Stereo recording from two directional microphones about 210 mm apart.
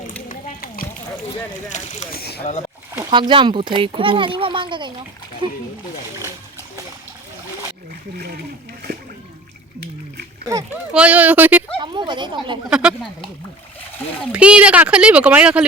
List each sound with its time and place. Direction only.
0.3 s a sound: 40° left (ahead or behind)
1.3 s speech: 35° left (ahead or behind)
3.1 s speech: 25° right (ahead or behind)
8.1 s speech: 50° right (ahead or behind)
10.5 s speech: 10° right (ahead or behind)
11.8 s speech: 20° right (ahead or behind)
12.7 s speech: 5° right (ahead or behind)
14.3 s speech: 5° right (ahead or behind)